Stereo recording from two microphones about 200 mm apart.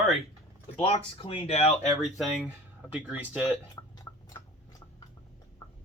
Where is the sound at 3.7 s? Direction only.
20° left (ahead or behind).